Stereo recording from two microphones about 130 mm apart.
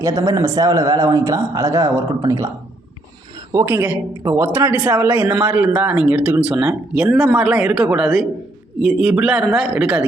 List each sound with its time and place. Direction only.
0.0 s a man's voice: 25° right (ahead or behind)
3.5 s a man's voice: 20° right (ahead or behind)